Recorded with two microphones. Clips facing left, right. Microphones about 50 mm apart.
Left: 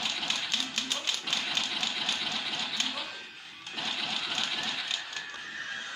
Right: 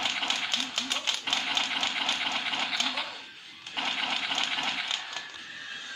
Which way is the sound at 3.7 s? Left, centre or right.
Right.